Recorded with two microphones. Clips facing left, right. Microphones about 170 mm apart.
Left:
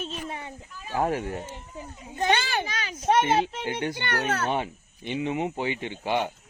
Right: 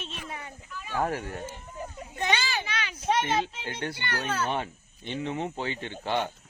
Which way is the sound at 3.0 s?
55° left (ahead or behind).